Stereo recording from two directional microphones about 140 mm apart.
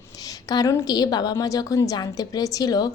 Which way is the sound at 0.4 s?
25° left (ahead or behind).